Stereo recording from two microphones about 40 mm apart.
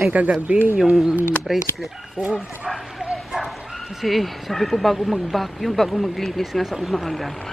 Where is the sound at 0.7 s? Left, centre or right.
Centre.